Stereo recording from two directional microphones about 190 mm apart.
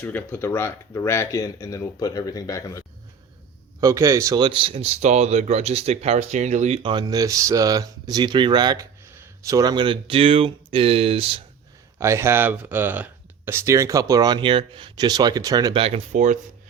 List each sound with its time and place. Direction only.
0.0 s speech: 10° left (ahead or behind)
3.8 s speech: 15° right (ahead or behind)
11.9 s speech: 15° right (ahead or behind); by 16.4 s 40° right (ahead or behind)